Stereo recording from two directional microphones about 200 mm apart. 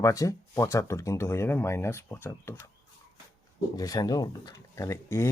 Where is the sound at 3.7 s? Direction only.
20° left (ahead or behind).